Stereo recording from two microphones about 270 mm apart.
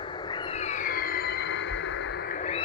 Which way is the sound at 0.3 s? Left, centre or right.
Centre.